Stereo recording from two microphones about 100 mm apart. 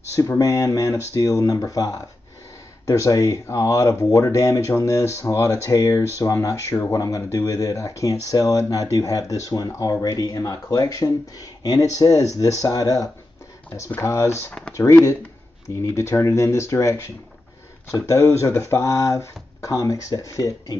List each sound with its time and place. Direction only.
0.4 s speech: 35° left (ahead or behind)
13.7 s speech: 25° left (ahead or behind)